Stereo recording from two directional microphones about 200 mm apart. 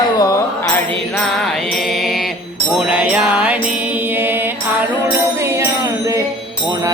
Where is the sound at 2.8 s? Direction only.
5° right (ahead or behind).